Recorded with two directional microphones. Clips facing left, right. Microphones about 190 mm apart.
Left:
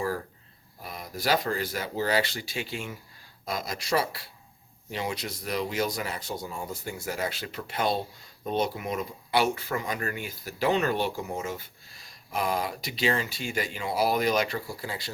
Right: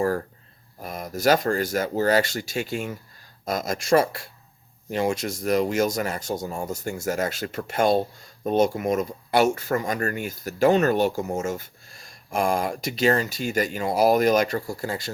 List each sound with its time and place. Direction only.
0.8 s speech: 45° right (ahead or behind)